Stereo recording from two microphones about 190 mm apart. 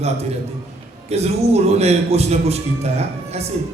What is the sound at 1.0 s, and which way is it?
A man's voice, 35° right (ahead or behind).